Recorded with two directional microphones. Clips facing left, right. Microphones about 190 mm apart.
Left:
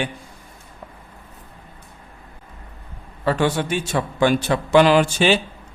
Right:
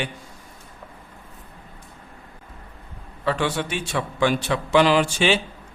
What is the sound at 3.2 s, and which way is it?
A man's voice, 45° left (ahead or behind).